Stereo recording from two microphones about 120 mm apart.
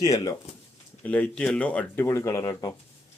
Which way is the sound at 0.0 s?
30° left (ahead or behind).